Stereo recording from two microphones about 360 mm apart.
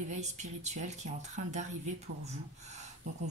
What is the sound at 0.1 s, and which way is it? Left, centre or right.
Speech, centre.